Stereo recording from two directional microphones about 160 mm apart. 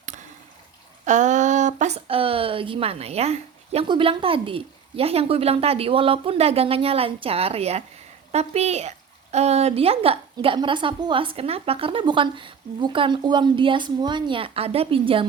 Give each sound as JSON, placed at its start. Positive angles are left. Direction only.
{"t": 1.0, "sound": "speech", "side_deg": -50}